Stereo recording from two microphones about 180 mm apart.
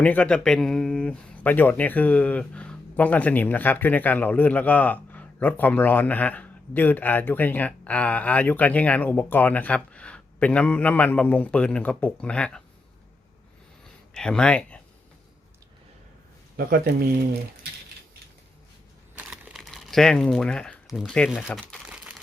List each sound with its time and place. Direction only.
0.0 s speech: 10° left (ahead or behind)
14.1 s speech: 5° left (ahead or behind)
16.6 s speech: 55° right (ahead or behind)
19.1 s crumpling: 5° right (ahead or behind)
21.7 s a sound: 5° right (ahead or behind)